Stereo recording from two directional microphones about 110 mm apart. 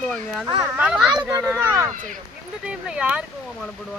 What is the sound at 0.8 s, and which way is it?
Speech, 10° right (ahead or behind).